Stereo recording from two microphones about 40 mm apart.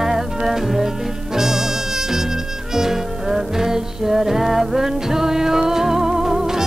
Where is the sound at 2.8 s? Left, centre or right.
Centre.